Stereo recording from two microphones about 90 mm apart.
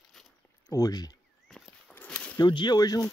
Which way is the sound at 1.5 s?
5° left (ahead or behind).